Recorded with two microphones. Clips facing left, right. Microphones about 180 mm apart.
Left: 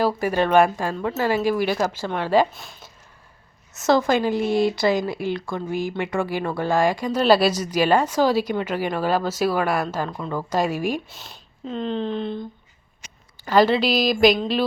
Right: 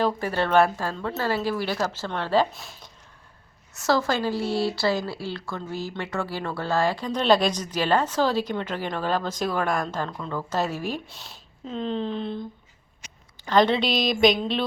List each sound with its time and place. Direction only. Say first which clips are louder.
0.0 s speech: left 4 dB; 10° left (ahead or behind)
2.5 s speech: left 1 dB; centre (ahead or behind)
3.8 s speech: left 5 dB; 20° left (ahead or behind)
11.1 s speech: left 2 dB; centre (ahead or behind)